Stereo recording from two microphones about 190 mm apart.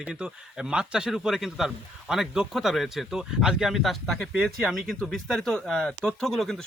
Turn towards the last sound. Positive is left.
turn(degrees=0)  # may be behind; listen again after turning